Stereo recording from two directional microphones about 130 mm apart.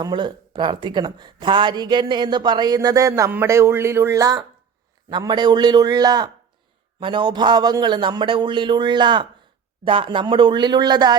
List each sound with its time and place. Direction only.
0.0 s speech: 35° right (ahead or behind)